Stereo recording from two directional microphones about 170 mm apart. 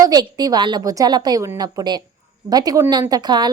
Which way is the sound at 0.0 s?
25° right (ahead or behind).